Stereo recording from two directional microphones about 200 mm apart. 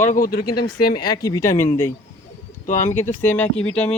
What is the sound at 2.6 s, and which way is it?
Speech, 40° left (ahead or behind).